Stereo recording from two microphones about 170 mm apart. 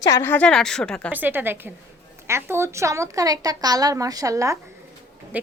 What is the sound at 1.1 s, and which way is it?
A woman's voice, 10° right (ahead or behind).